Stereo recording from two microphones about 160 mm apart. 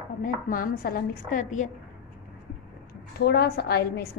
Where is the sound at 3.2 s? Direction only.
80° left.